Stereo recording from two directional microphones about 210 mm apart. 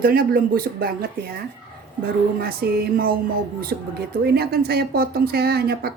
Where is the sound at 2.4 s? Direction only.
45° right (ahead or behind).